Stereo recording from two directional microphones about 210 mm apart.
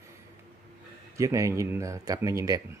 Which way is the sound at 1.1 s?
15° right (ahead or behind).